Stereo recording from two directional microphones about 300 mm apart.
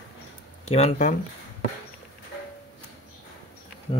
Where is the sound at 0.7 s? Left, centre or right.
Left.